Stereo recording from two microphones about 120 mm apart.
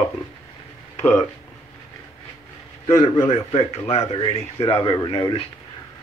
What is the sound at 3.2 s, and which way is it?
Speech, 65° left (ahead or behind).